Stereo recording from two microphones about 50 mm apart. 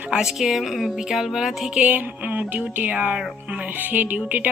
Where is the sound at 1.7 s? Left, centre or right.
Right.